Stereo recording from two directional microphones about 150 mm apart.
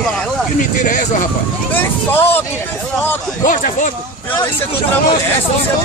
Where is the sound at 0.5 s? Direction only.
60° left (ahead or behind).